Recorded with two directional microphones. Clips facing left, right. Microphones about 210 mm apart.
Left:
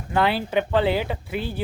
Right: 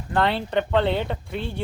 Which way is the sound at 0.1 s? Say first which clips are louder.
Left 1 dB; 5° left (ahead or behind).